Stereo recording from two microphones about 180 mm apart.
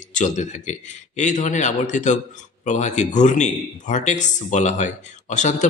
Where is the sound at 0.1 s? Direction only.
45° left (ahead or behind).